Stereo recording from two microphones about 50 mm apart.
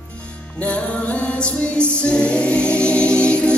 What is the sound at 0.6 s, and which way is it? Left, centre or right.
Music, left.